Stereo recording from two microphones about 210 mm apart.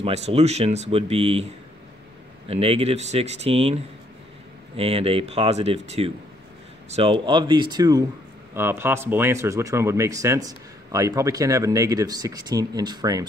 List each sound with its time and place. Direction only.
0.0 s speech: 30° right (ahead or behind)